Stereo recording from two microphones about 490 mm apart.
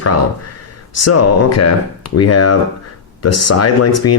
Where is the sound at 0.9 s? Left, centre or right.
Left.